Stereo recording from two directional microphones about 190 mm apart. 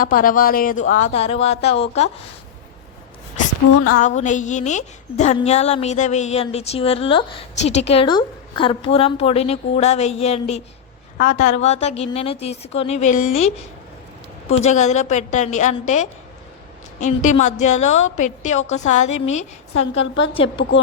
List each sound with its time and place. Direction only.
0.0 s speech: 50° left (ahead or behind)
1.1 s a woman's voice: 30° left (ahead or behind)
3.9 s a woman's voice: 40° left (ahead or behind)
14.6 s a woman's voice: 35° left (ahead or behind)
20.0 s a woman's voice: 80° left
20.3 s a woman's voice: 30° left (ahead or behind)